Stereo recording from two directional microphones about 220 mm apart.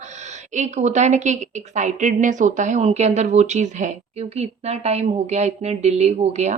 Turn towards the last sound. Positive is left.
turn(degrees=-30)  # may be behind; listen again after turning